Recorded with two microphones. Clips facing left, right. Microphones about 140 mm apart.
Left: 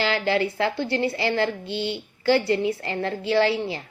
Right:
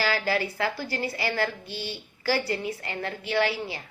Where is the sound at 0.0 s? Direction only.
25° left (ahead or behind).